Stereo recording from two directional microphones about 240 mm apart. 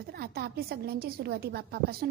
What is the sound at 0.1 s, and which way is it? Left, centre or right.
A woman's voice, right.